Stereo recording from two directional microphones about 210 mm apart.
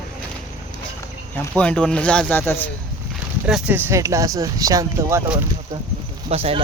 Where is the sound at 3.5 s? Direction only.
5° right (ahead or behind).